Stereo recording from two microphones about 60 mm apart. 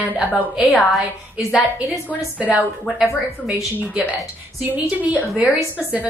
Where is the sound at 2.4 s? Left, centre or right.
Right.